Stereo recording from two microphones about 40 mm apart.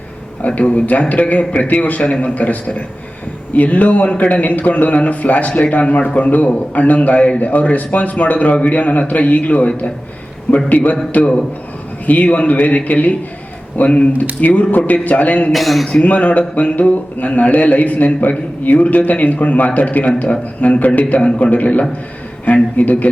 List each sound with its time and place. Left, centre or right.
0.4 s a man's voice: left
11.1 s a man's voice: left
15.5 s speech: centre
15.9 s a man's voice: left
21.0 s a man's voice: left
21.3 s a man's voice: left